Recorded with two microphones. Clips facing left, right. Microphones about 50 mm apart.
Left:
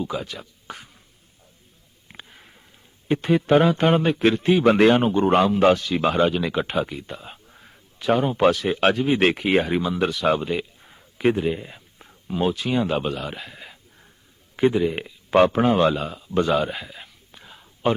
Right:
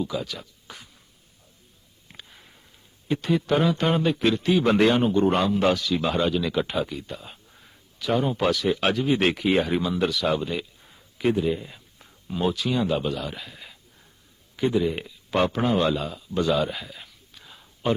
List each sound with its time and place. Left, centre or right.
0.1 s a man's voice: left
0.7 s a sound: left
2.0 s a sound: left
3.1 s a man's voice: left
8.0 s a man's voice: left
9.7 s speech: centre
10.0 s a man's voice: left